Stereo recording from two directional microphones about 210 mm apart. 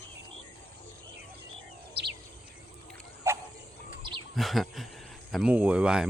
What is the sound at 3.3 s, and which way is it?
Wild animals, 10° right (ahead or behind).